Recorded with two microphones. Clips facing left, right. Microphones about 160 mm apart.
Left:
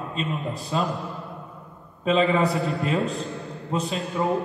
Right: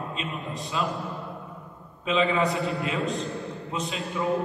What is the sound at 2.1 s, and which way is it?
Speech, 40° left (ahead or behind).